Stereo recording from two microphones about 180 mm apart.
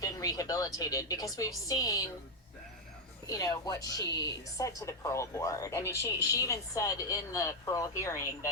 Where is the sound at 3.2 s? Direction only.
20° left (ahead or behind).